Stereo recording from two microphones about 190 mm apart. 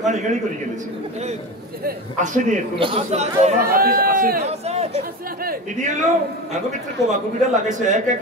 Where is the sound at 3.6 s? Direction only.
50° right (ahead or behind); by 5.0 s 35° right (ahead or behind).